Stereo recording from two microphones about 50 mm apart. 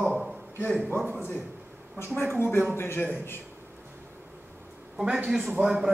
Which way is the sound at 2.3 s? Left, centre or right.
Left.